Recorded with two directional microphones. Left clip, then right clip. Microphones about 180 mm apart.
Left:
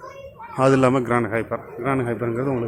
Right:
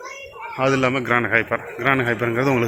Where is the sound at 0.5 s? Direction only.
25° left (ahead or behind).